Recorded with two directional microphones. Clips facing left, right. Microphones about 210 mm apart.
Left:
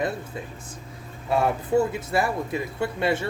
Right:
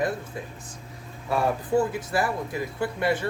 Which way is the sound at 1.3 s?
25° left (ahead or behind).